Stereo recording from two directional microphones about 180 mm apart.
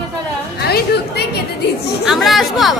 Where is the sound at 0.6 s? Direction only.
65° left (ahead or behind).